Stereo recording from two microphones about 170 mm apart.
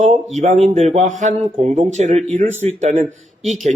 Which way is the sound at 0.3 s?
45° right (ahead or behind).